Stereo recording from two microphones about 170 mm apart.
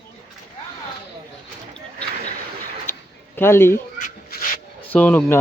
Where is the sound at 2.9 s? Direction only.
15° left (ahead or behind).